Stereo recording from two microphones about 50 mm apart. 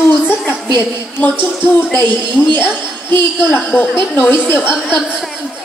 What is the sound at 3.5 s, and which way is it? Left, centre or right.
A woman's voice, left.